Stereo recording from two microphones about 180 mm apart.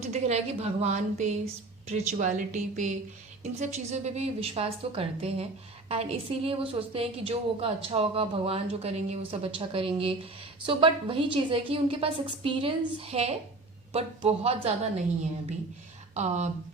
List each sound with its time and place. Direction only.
0.1 s a woman's voice: 35° right (ahead or behind)
16.1 s a woman's voice: 40° right (ahead or behind)